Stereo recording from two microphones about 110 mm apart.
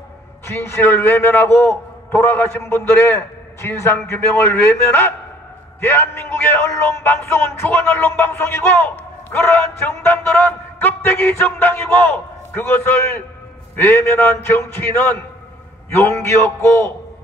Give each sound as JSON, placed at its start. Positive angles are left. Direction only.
{"t": 0.6, "sound": "a man's voice", "side_deg": 20}
{"t": 16.0, "sound": "a man's voice", "side_deg": 25}